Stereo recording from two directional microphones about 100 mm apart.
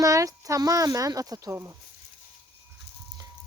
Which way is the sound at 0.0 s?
35° right (ahead or behind).